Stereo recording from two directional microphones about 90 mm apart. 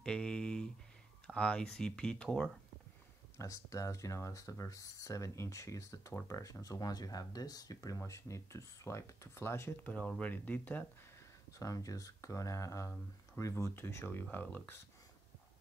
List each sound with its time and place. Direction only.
0.0 s speech: 10° left (ahead or behind)
3.3 s speech: 40° left (ahead or behind)
9.8 s speech: 15° left (ahead or behind)
11.5 s speech: 40° left (ahead or behind); by 14.8 s 20° left (ahead or behind)